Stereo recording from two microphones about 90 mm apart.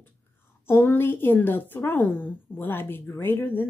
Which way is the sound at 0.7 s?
25° left (ahead or behind).